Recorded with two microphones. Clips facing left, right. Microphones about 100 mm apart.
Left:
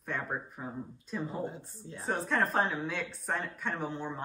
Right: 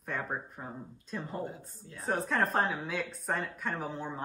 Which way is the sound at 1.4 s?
25° left (ahead or behind).